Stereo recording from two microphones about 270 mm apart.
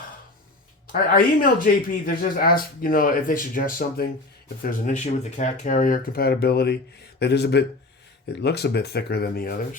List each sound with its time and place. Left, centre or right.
0.9 s speech: left